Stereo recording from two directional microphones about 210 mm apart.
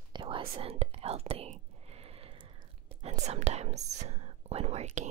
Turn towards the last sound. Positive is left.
turn(degrees=-30)  # may be behind; listen again after turning